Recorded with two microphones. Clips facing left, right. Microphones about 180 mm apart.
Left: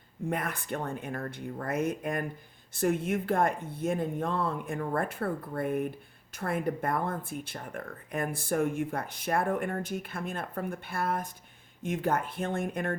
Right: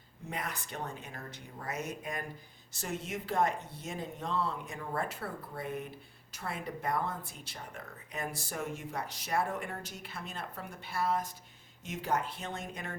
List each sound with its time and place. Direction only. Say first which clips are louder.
0.3 s speech: left 7 dB; 55° left (ahead or behind)